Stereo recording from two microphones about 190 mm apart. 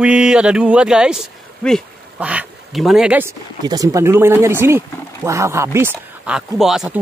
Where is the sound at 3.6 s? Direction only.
20° right (ahead or behind).